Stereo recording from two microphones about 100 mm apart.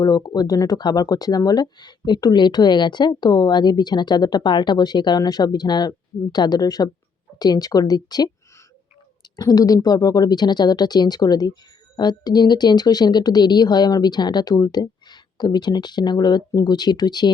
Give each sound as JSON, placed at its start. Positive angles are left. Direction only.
{"t": 0.0, "sound": "speech", "side_deg": 40}
{"t": 9.3, "sound": "speech", "side_deg": 40}